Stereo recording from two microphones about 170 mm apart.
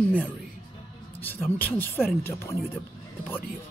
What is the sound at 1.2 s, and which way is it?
Speech, 10° left (ahead or behind).